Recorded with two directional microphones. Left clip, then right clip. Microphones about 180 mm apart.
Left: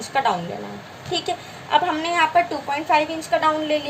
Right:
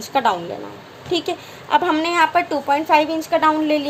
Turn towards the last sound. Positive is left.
turn(degrees=-45)  # may be behind; listen again after turning